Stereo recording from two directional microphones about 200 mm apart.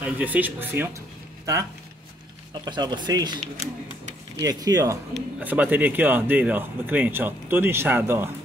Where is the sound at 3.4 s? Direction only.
35° right (ahead or behind).